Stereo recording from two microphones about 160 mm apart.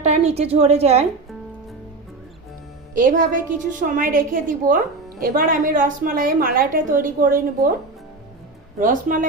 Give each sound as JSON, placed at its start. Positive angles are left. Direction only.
{"t": 0.0, "sound": "a woman's voice", "side_deg": -40}
{"t": 2.9, "sound": "a woman's voice", "side_deg": -55}
{"t": 8.8, "sound": "a woman's voice", "side_deg": -55}